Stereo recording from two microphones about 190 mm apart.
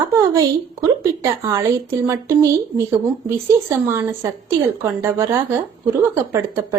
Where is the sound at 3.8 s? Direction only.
15° right (ahead or behind).